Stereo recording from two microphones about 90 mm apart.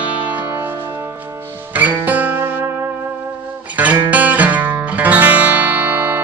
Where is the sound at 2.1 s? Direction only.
20° right (ahead or behind).